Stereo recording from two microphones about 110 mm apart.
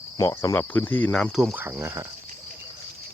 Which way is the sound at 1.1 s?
Centre (ahead or behind).